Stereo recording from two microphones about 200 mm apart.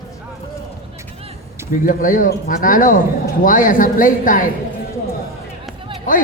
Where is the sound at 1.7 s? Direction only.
45° left (ahead or behind).